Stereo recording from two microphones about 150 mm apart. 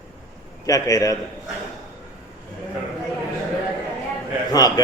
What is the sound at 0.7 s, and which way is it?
Speech, 25° left (ahead or behind).